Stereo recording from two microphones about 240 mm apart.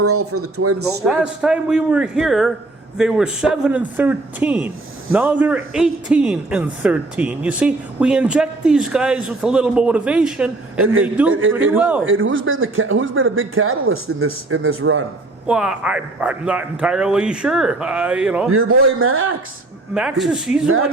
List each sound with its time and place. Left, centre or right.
0.0 s speech: right
1.0 s a man's voice: centre
11.3 s speech: right
11.5 s a man's voice: centre
12.0 s speech: right
15.4 s a man's voice: centre
18.5 s speech: right
19.9 s a man's voice: centre